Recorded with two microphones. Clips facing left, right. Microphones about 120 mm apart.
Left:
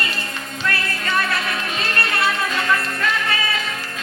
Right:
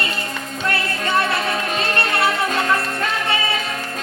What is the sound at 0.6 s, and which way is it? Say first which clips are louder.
Music: right 2 dB; 25° right (ahead or behind).